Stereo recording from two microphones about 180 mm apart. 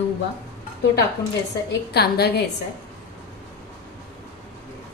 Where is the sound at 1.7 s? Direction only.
65° left (ahead or behind).